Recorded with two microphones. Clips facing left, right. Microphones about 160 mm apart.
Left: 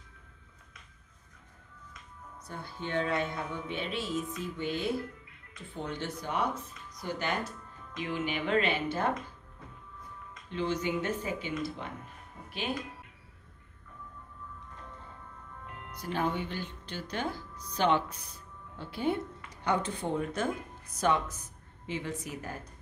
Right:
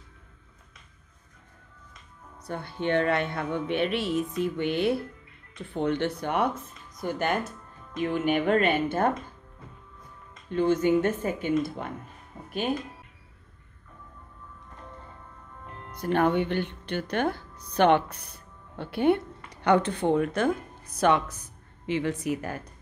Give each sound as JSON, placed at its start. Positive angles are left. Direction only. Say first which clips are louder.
{"t": 2.4, "sound": "a woman's voice", "louder": "right 10 dB", "side_deg": -70}
{"t": 10.5, "sound": "speech", "louder": "right 9 dB", "side_deg": -50}
{"t": 12.4, "sound": "music", "louder": "right 7 dB", "side_deg": -45}
{"t": 16.0, "sound": "a woman's voice", "louder": "right 9 dB", "side_deg": -60}